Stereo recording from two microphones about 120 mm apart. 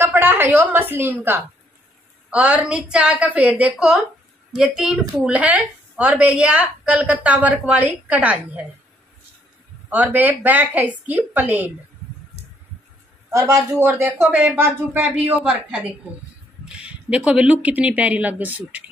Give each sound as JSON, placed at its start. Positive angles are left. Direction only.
{"t": 0.0, "sound": "a woman's voice", "side_deg": -20}
{"t": 9.8, "sound": "speech", "side_deg": -15}
{"t": 13.3, "sound": "speech", "side_deg": -25}
{"t": 16.6, "sound": "speech", "side_deg": -10}